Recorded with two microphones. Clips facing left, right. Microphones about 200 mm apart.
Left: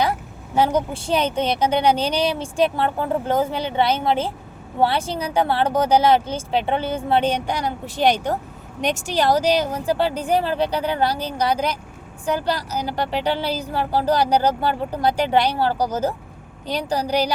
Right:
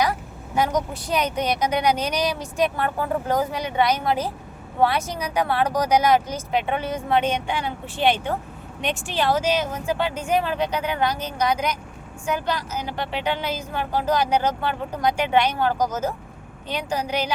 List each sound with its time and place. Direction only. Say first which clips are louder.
0.5 s a woman's voice: left 3 dB; 30° left (ahead or behind)